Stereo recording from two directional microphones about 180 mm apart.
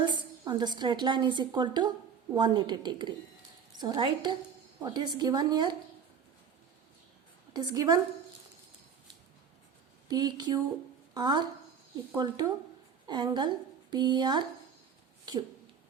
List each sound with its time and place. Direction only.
0.0 s a woman's voice: 25° right (ahead or behind)
7.5 s a woman's voice: 20° right (ahead or behind)
10.1 s a woman's voice: 25° right (ahead or behind)